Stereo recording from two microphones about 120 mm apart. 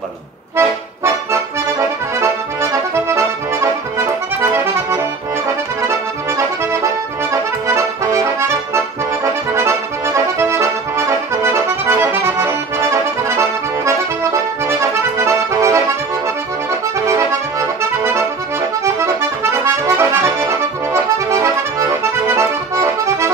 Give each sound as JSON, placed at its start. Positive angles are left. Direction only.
{"t": 0.6, "sound": "accordion", "side_deg": -25}
{"t": 5.9, "sound": "accordion", "side_deg": -25}
{"t": 17.3, "sound": "accordion", "side_deg": -25}